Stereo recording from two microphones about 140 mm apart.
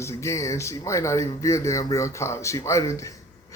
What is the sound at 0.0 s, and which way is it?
A man's voice, 20° left (ahead or behind).